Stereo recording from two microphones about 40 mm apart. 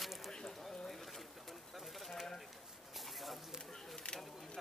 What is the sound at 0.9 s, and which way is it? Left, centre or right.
Pigeon, centre.